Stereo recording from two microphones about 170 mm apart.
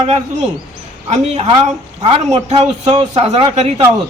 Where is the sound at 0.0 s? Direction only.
40° right (ahead or behind).